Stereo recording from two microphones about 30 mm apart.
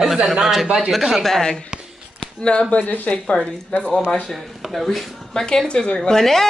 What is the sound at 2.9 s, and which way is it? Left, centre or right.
Speech, left.